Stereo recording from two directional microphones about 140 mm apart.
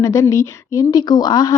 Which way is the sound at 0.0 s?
20° left (ahead or behind).